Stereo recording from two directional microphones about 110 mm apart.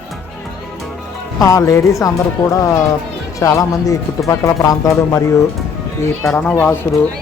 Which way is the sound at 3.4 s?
30° left (ahead or behind).